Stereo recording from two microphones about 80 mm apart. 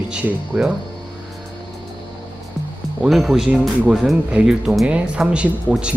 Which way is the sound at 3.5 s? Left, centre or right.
Centre.